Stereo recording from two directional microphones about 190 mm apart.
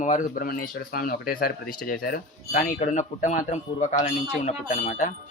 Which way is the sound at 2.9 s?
40° left (ahead or behind).